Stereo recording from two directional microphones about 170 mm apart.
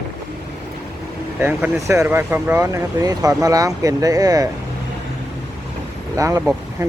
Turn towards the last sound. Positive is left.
turn(degrees=-20)  # may be behind; listen again after turning